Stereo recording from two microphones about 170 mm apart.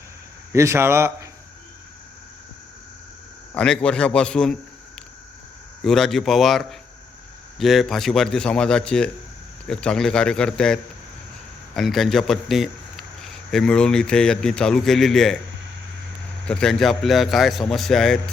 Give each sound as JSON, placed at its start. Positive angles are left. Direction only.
{"t": 0.5, "sound": "a man's voice", "side_deg": -15}
{"t": 3.5, "sound": "a man's voice", "side_deg": 5}
{"t": 5.8, "sound": "a man's voice", "side_deg": 0}
{"t": 16.5, "sound": "a man's voice", "side_deg": 5}